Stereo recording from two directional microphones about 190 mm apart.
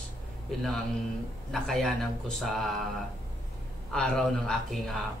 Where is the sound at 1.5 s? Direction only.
5° left (ahead or behind).